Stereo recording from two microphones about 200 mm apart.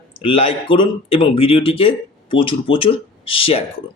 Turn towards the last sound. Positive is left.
turn(degrees=30)  # may be behind; listen again after turning